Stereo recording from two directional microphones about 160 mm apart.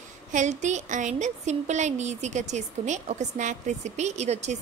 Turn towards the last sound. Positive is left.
turn(degrees=-45)  # may be behind; listen again after turning